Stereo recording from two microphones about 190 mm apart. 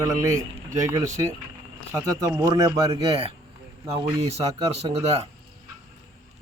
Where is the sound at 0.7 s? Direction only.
15° right (ahead or behind).